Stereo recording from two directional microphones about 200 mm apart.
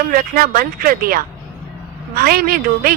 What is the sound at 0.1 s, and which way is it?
Speech, 45° right (ahead or behind).